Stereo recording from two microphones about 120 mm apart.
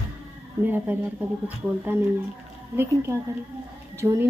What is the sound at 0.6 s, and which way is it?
Speech, 15° right (ahead or behind).